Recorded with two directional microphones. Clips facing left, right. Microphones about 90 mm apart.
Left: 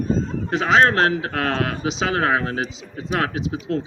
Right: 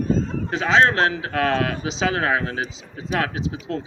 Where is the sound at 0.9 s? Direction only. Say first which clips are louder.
Left 2 dB; 35° left (ahead or behind).